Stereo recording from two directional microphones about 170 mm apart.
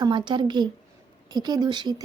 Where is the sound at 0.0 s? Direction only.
25° right (ahead or behind).